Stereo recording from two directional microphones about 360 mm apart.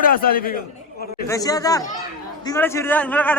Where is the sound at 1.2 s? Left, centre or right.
Centre.